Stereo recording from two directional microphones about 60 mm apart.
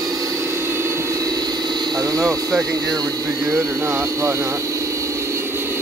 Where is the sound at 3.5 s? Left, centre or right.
Right.